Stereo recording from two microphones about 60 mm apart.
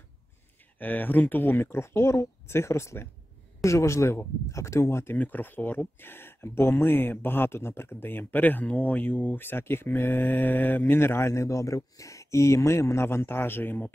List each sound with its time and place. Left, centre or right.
0.7 s speech: left
5.1 s speech: left